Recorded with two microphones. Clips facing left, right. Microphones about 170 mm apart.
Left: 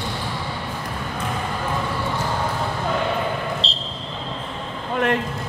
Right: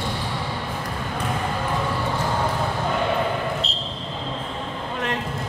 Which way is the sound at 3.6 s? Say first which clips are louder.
Left 1 dB; 30° left (ahead or behind).